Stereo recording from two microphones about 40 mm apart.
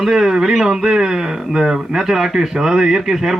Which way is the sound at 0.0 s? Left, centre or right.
Centre.